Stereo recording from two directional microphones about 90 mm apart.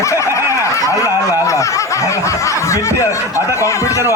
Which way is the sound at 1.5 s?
35° left (ahead or behind).